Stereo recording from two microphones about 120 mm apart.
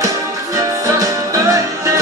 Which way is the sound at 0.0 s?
25° right (ahead or behind).